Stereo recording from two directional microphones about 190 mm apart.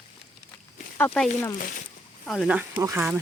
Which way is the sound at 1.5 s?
45° left (ahead or behind).